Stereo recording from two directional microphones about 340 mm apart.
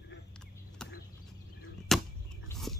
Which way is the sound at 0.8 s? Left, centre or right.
Centre.